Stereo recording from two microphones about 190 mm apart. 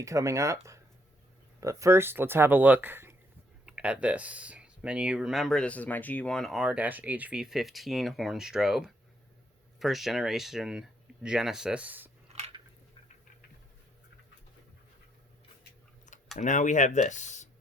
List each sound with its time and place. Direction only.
0.0 s speech: 15° right (ahead or behind)
12.3 s biting: 35° right (ahead or behind)
16.4 s speech: 40° left (ahead or behind)